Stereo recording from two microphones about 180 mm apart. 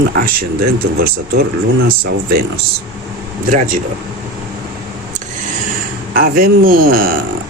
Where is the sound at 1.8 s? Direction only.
55° right (ahead or behind).